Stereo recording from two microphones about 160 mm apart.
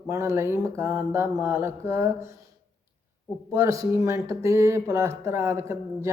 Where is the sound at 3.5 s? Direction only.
20° right (ahead or behind).